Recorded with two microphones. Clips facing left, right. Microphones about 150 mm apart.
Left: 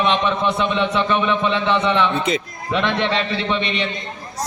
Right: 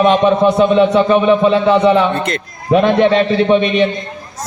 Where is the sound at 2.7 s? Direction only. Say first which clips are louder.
Right 10 dB; 45° right (ahead or behind).